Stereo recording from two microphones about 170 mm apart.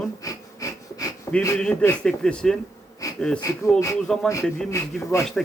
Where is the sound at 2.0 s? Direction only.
5° left (ahead or behind).